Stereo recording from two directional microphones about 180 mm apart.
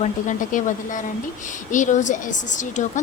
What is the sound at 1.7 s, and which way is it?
A woman's voice, 45° left (ahead or behind).